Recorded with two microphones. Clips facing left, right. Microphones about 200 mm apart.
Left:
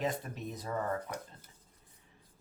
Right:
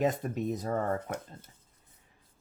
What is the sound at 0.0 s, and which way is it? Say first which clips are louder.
Speech: right 7 dB; 45° right (ahead or behind).